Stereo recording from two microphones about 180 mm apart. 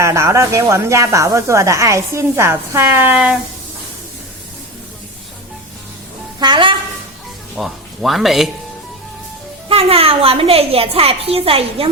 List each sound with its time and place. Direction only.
0.0 s speech: 15° right (ahead or behind)
6.4 s a woman's voice: 25° right (ahead or behind)
7.5 s speech: centre (ahead or behind)
9.6 s a child's voice: 30° right (ahead or behind)